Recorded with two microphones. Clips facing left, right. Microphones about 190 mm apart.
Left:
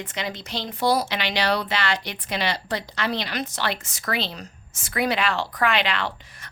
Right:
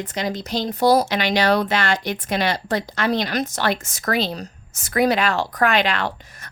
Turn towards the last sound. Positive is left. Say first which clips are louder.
# right 3 dB
turn(degrees=-45)  # may be behind; listen again after turning